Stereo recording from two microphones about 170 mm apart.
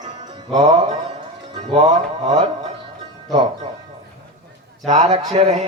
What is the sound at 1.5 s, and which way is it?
Music, 35° right (ahead or behind).